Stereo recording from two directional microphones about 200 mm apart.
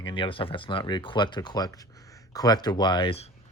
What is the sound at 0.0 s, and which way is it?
Speech, 25° left (ahead or behind).